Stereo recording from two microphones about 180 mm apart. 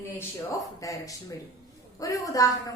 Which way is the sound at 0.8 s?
20° left (ahead or behind).